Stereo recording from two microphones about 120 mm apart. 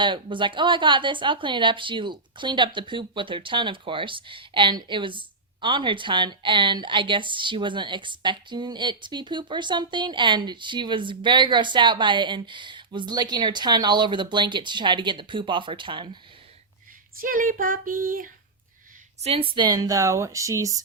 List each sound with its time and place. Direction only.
0.0 s speech: 45° right (ahead or behind)
19.2 s speech: 50° right (ahead or behind); by 20.8 s 25° right (ahead or behind)